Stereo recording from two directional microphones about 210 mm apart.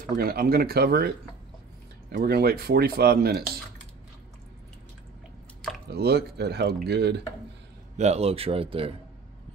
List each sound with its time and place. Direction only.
0.1 s speech: 45° right (ahead or behind)
2.1 s speech: 45° right (ahead or behind)
5.9 s speech: 50° right (ahead or behind)
8.0 s speech: 30° right (ahead or behind)